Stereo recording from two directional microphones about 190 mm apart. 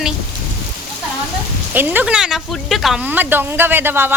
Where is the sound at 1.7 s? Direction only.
10° right (ahead or behind).